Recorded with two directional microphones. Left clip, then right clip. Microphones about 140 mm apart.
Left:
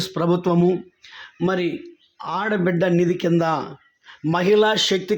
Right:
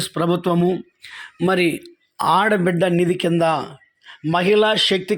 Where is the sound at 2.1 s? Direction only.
75° right (ahead or behind).